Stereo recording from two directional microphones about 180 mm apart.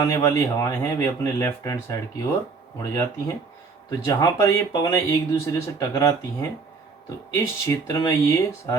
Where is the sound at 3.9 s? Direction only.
20° left (ahead or behind).